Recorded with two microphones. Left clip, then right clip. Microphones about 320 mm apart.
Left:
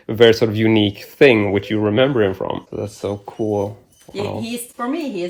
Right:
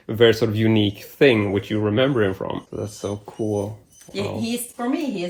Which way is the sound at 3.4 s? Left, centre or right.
Left.